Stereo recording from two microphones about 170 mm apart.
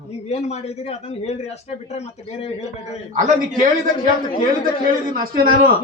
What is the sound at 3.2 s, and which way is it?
Speech, 50° right (ahead or behind).